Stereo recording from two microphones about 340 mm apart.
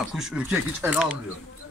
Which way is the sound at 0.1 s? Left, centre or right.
Centre.